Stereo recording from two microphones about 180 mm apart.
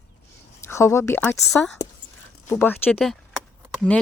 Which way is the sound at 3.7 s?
5° left (ahead or behind).